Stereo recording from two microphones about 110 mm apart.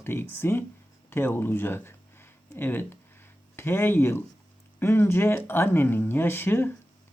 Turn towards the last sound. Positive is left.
turn(degrees=20)  # may be behind; listen again after turning